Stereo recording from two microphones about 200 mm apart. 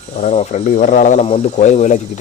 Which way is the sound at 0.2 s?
35° left (ahead or behind).